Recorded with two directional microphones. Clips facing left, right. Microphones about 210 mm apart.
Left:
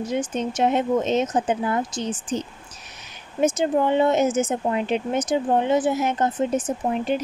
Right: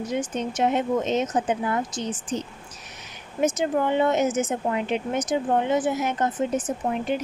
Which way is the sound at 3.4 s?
30° left (ahead or behind).